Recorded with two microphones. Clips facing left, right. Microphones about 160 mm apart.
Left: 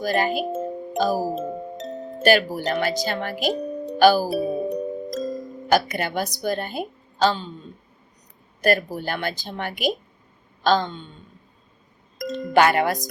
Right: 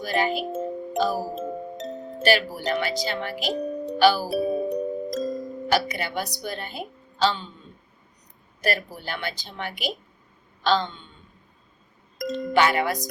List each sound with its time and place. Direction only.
0.0 s speech: 40° left (ahead or behind)
0.9 s music: 40° left (ahead or behind)
1.4 s music: centre (ahead or behind)
2.5 s speech: 45° left (ahead or behind)
3.3 s music: centre (ahead or behind)
3.9 s music: 45° left (ahead or behind)
4.3 s music: centre (ahead or behind)
5.6 s speech: 45° left (ahead or behind)
8.6 s speech: 45° left (ahead or behind)
10.6 s a sound: 45° left (ahead or behind)
12.2 s speech: centre (ahead or behind)
12.5 s speech: 50° left (ahead or behind)